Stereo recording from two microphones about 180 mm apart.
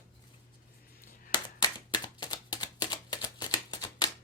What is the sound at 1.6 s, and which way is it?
Typewriter, 25° left (ahead or behind).